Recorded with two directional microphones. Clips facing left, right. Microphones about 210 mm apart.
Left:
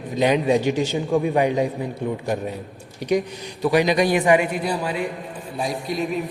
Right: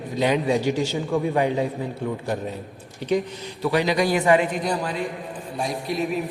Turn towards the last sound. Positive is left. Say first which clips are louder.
# even
turn(degrees=0)  # may be behind; listen again after turning